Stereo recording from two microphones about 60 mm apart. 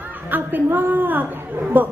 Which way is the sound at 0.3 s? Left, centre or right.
Right.